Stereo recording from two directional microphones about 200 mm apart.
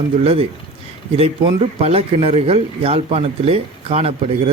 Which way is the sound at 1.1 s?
30° right (ahead or behind).